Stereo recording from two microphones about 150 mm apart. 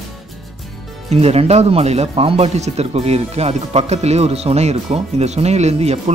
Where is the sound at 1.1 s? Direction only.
45° right (ahead or behind).